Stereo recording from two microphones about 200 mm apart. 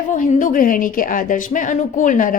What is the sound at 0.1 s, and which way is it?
Speech, 40° left (ahead or behind).